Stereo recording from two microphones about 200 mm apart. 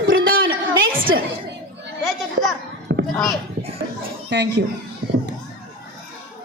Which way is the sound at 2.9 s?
55° right (ahead or behind).